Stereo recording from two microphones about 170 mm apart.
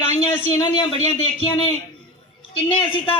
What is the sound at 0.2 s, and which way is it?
A man's voice, 30° left (ahead or behind).